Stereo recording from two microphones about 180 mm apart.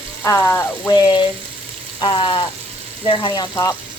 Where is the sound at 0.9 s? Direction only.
25° left (ahead or behind).